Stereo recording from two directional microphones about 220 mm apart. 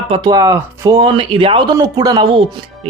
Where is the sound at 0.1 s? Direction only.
20° right (ahead or behind).